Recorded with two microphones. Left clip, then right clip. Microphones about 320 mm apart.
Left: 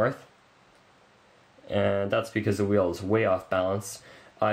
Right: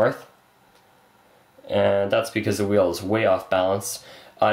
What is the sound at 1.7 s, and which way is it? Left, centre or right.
Speech, centre.